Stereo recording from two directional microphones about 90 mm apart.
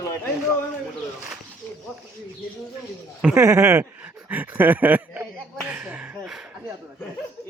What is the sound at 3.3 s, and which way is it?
Speech, 30° right (ahead or behind).